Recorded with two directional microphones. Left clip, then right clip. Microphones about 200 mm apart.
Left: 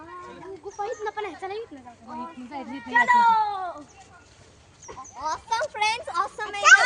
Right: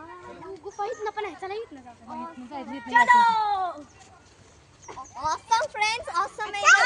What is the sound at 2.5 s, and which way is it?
Children playing, 15° left (ahead or behind).